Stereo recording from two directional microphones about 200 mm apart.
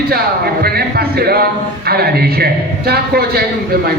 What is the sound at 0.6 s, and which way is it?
A man's voice, 50° right (ahead or behind).